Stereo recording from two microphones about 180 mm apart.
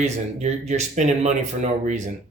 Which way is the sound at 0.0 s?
40° right (ahead or behind).